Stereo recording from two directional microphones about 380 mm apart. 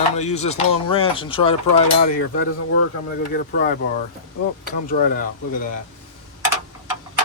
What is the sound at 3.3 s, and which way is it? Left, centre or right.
Speech, left.